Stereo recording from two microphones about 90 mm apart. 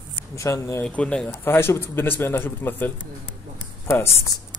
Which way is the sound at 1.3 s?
25° left (ahead or behind).